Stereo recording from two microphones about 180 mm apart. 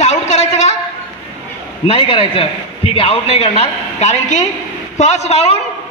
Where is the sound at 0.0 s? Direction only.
40° left (ahead or behind).